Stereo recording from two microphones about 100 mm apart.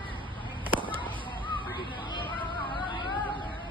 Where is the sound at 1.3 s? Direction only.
55° left (ahead or behind).